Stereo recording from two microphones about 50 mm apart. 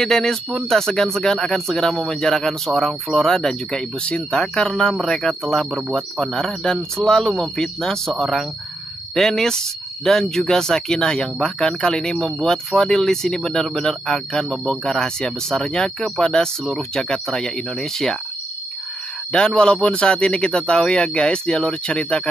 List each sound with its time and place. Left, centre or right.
0.0 s speech: centre
4.0 s speech: left
19.3 s speech: centre